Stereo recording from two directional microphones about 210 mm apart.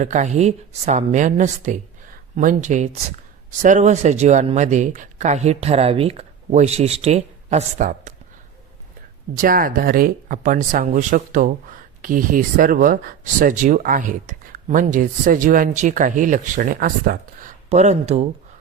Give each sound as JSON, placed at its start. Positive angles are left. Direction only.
{"t": 0.0, "sound": "speech", "side_deg": -35}
{"t": 9.4, "sound": "speech", "side_deg": -40}